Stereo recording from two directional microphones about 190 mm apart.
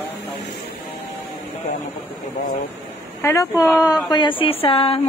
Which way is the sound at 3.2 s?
15° left (ahead or behind).